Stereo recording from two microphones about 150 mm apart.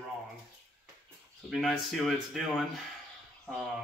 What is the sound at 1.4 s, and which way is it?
Speech, centre (ahead or behind).